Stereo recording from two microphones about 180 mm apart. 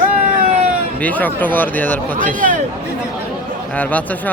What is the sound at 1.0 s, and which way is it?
Speech, 10° left (ahead or behind).